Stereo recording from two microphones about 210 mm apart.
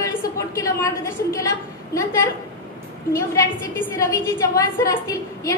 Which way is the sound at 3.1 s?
15° left (ahead or behind).